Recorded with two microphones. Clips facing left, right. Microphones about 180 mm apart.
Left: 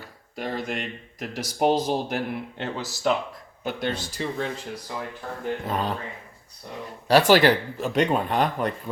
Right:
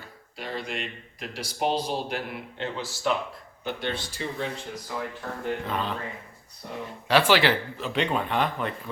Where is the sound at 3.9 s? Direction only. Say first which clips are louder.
Left 3 dB; 40° left (ahead or behind).